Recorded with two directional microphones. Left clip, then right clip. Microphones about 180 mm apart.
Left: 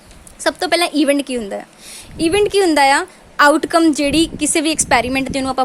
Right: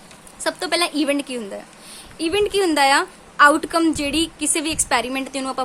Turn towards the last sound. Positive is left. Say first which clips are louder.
# left 7 dB
turn(degrees=25)  # may be behind; listen again after turning